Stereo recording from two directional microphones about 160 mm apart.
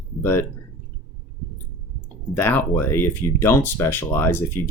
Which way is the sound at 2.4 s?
10° left (ahead or behind).